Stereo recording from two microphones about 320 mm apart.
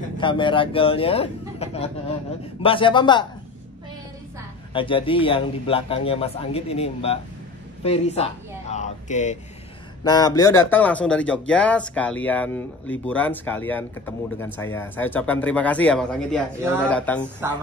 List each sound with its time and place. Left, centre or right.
0.2 s a man's voice: centre
4.7 s a man's voice: centre